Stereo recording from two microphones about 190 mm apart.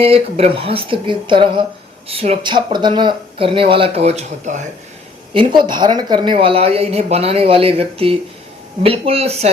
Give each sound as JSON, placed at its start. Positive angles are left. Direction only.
{"t": 0.0, "sound": "speech", "side_deg": -30}
{"t": 5.3, "sound": "speech", "side_deg": -25}